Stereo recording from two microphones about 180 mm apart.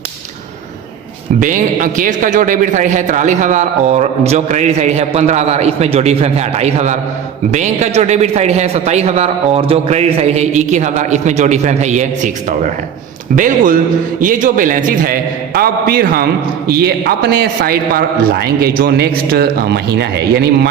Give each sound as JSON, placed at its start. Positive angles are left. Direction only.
{"t": 1.4, "sound": "a man's voice", "side_deg": -45}